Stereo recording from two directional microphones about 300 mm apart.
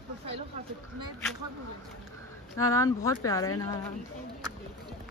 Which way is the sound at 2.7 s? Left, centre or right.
Centre.